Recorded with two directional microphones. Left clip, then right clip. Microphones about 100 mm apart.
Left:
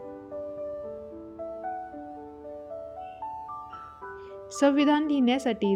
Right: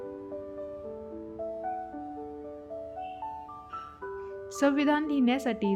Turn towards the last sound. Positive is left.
turn(degrees=25)  # may be behind; listen again after turning